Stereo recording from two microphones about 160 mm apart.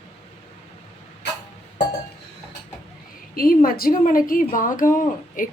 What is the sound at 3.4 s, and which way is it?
A woman's voice, 65° left (ahead or behind).